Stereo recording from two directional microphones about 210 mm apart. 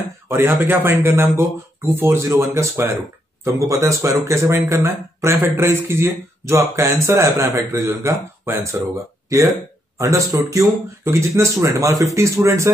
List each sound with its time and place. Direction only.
0.3 s speech: 10° right (ahead or behind)